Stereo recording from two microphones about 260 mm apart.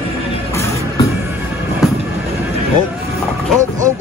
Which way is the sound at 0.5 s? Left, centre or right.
Centre.